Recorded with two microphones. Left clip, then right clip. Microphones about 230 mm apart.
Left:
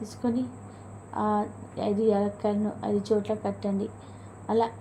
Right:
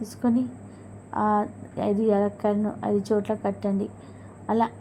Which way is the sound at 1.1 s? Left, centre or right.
Right.